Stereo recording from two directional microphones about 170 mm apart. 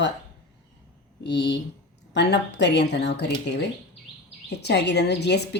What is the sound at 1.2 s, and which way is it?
A woman's voice, 90° left.